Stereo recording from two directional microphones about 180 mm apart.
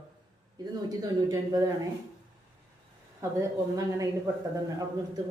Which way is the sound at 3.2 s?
15° right (ahead or behind).